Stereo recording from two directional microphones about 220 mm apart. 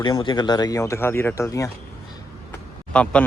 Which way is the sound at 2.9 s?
5° left (ahead or behind).